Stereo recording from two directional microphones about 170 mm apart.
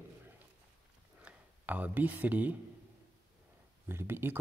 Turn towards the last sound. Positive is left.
turn(degrees=-15)  # may be behind; listen again after turning